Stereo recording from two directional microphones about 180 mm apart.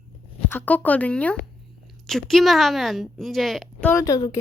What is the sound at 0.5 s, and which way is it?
A woman's voice, 10° left (ahead or behind).